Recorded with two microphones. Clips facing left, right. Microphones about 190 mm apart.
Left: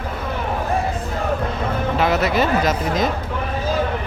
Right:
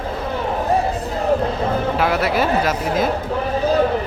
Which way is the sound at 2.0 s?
10° right (ahead or behind).